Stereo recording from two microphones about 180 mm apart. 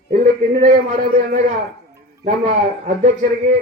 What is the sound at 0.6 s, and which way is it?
Speech, 40° right (ahead or behind).